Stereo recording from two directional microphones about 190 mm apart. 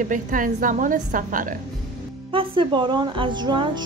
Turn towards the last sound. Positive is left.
turn(degrees=-25)  # may be behind; listen again after turning